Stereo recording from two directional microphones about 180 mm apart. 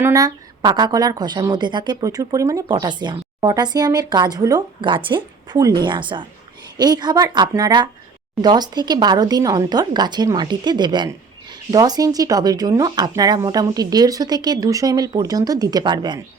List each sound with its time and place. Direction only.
0.0 s speech: 20° right (ahead or behind)